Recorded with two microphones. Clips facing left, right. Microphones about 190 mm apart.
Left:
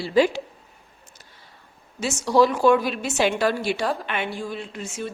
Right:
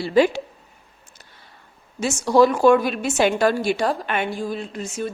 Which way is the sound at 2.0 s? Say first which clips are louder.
Right 3 dB; 50° right (ahead or behind).